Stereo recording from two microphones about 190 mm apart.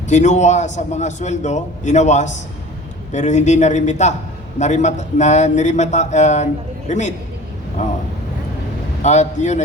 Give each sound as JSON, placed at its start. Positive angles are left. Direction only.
{"t": 0.1, "sound": "speech", "side_deg": 40}
{"t": 9.0, "sound": "speech", "side_deg": 40}